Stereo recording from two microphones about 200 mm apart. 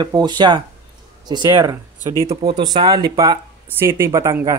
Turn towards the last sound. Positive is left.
turn(degrees=-15)  # may be behind; listen again after turning